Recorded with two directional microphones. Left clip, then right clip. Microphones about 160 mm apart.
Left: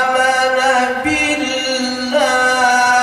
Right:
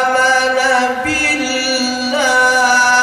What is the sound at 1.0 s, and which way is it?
Music, 55° right (ahead or behind).